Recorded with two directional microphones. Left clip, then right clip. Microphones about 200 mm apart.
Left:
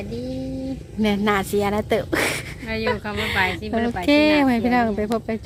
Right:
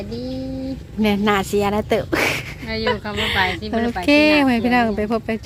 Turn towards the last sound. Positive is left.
turn(degrees=-5)  # may be behind; listen again after turning